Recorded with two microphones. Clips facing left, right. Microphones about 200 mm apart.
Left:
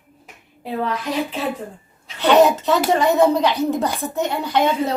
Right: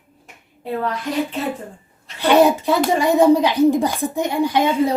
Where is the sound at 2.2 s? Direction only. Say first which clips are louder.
Even; 10° right (ahead or behind).